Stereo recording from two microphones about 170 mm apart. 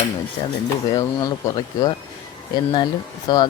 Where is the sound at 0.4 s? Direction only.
30° left (ahead or behind).